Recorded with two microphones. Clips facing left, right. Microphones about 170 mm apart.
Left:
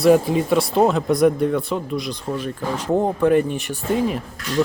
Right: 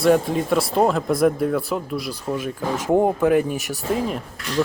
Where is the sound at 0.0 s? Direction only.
Centre (ahead or behind).